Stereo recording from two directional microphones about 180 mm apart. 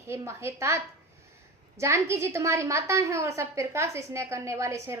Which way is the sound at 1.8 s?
15° right (ahead or behind).